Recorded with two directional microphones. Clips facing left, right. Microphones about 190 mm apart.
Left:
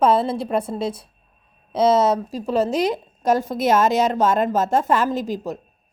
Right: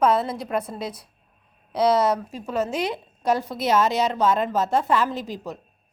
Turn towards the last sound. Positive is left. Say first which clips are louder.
# left 6 dB
turn(degrees=45)  # may be behind; listen again after turning